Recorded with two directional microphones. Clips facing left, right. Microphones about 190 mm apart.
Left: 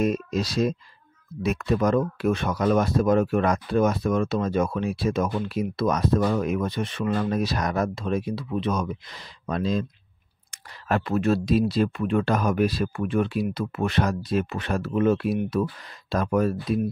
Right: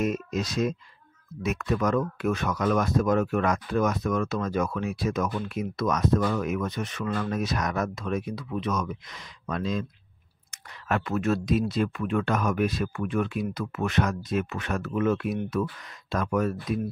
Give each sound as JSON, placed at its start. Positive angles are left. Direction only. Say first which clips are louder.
{"t": 0.0, "sound": "speech", "louder": "left 3 dB", "side_deg": 30}
{"t": 10.9, "sound": "speech", "louder": "left 3 dB", "side_deg": 30}